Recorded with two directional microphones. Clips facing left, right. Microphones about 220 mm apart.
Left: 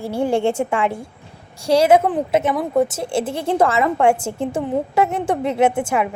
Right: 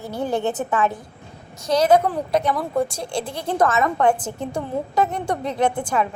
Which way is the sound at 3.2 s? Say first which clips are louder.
Left 2 dB; 25° left (ahead or behind).